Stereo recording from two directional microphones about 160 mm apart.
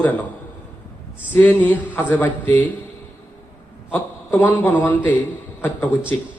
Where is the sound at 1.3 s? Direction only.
10° left (ahead or behind).